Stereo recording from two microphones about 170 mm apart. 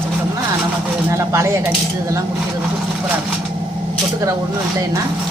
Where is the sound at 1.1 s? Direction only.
15° right (ahead or behind).